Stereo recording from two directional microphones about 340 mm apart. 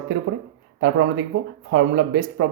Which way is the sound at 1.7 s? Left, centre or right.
Right.